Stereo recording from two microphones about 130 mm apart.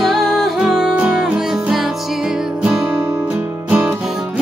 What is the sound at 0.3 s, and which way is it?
Music, centre (ahead or behind).